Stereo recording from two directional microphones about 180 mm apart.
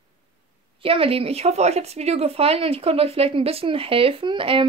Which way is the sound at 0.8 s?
30° right (ahead or behind).